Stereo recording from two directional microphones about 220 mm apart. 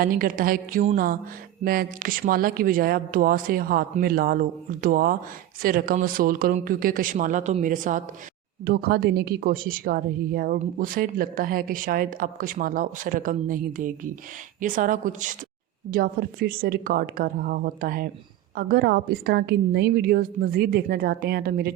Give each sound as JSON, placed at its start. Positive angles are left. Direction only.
{"t": 0.0, "sound": "a woman's voice", "side_deg": -40}